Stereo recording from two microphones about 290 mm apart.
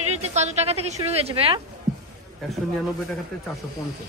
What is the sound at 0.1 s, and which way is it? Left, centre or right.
A woman's voice, right.